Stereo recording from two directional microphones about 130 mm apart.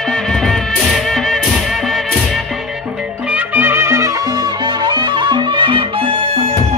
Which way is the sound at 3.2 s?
10° right (ahead or behind).